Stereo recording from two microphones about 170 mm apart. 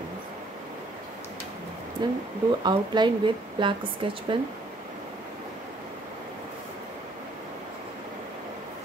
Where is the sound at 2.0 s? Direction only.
25° right (ahead or behind).